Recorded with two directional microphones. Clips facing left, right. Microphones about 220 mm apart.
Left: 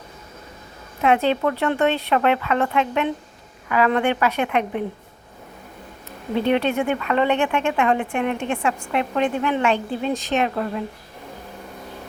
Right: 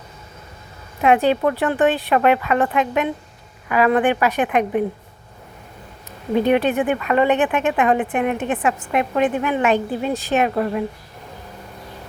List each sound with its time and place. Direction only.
1.0 s speech: 15° right (ahead or behind)
6.3 s speech: 10° right (ahead or behind)